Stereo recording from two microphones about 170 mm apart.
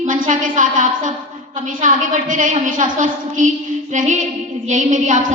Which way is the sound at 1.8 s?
50° right (ahead or behind).